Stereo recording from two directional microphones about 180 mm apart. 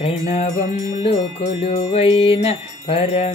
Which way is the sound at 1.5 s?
35° left (ahead or behind).